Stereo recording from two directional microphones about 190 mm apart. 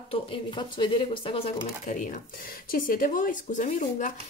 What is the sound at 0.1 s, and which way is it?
Speech, 25° left (ahead or behind).